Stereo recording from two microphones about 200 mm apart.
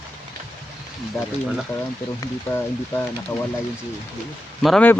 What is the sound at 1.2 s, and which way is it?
Speech, 5° left (ahead or behind).